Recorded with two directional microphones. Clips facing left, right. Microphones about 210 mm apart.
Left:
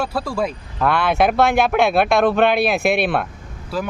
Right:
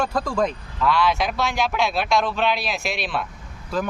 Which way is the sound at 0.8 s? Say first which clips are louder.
Left 3 dB; 55° left (ahead or behind).